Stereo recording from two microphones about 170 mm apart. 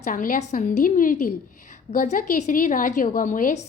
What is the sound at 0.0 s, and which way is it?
A woman's voice, 50° left (ahead or behind).